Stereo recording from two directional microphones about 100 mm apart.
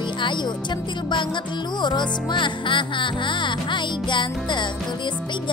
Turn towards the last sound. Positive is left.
turn(degrees=50)  # may be behind; listen again after turning